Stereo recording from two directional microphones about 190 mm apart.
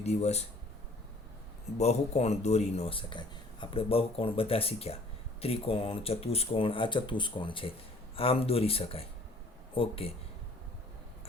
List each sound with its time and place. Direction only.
0.0 s speech: 35° left (ahead or behind)
1.8 s speech: 35° left (ahead or behind)